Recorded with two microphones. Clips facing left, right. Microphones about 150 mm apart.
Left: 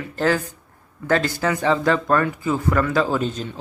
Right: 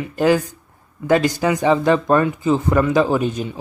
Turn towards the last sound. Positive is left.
turn(degrees=-15)  # may be behind; listen again after turning